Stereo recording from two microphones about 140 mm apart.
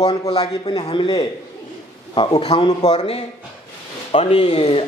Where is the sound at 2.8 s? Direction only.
50° left (ahead or behind).